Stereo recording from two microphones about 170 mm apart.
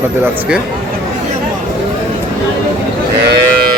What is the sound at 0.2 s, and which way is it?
Speech, 10° right (ahead or behind).